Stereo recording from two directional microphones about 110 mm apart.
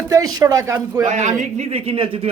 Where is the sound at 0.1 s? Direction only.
35° right (ahead or behind).